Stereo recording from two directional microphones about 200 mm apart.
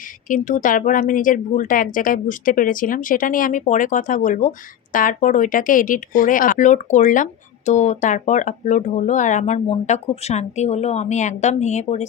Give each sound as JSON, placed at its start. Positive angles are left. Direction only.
{"t": 0.3, "sound": "speech", "side_deg": 40}